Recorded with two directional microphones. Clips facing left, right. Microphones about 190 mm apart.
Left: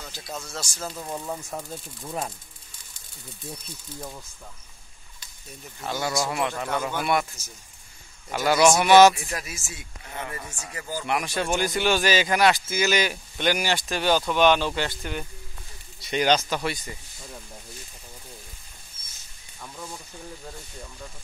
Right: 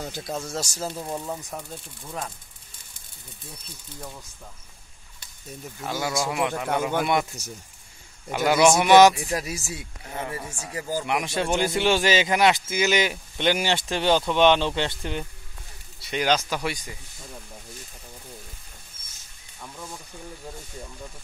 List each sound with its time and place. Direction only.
0.0 s speech: 50° right (ahead or behind)
0.3 s speech: 30° right (ahead or behind)
0.8 s a man's voice: 15° right (ahead or behind)
1.5 s speech: 10° left (ahead or behind)
5.8 s a man's voice: 10° right (ahead or behind)
8.3 s a man's voice: 15° right (ahead or behind)
9.4 s speech: 35° right (ahead or behind)
16.0 s a man's voice: 5° right (ahead or behind)
19.6 s speech: 5° right (ahead or behind)